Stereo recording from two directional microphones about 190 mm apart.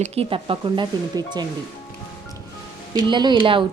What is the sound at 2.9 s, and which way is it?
Speech, 25° right (ahead or behind).